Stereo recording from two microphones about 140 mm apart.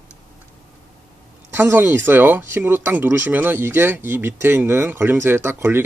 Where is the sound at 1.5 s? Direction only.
15° right (ahead or behind).